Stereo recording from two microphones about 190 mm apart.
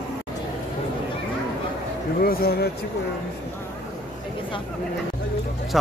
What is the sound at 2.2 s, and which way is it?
Speech, 55° left (ahead or behind).